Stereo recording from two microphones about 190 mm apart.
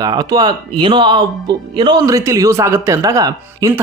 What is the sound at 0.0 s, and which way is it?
Speech, 20° right (ahead or behind).